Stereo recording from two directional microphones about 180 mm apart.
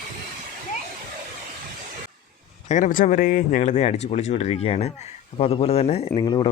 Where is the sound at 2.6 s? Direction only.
45° left (ahead or behind).